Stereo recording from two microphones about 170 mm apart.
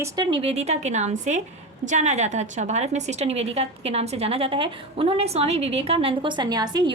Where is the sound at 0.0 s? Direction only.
25° right (ahead or behind).